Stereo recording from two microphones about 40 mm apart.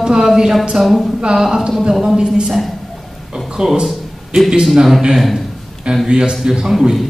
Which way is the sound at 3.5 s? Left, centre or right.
Centre.